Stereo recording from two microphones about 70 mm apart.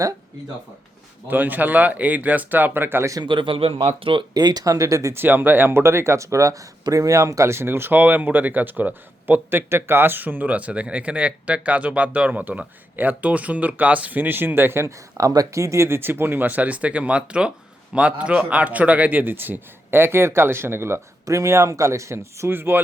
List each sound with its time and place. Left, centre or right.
1.3 s speech: right
4.4 s speech: right
5.1 s a man's voice: right